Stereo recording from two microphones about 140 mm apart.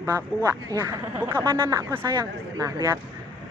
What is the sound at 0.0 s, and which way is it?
Speech, 25° right (ahead or behind).